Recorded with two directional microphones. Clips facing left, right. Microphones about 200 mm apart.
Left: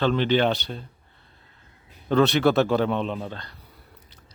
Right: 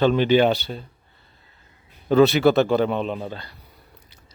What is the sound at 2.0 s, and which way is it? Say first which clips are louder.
Speech: right 4 dB; 5° right (ahead or behind).